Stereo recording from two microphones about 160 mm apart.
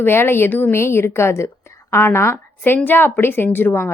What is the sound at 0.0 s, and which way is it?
A woman's voice, 15° left (ahead or behind).